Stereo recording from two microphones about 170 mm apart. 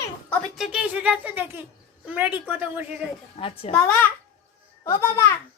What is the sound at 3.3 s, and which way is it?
Speech, 35° left (ahead or behind).